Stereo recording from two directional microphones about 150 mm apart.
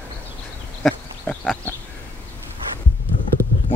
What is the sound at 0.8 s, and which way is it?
Goat, 5° left (ahead or behind).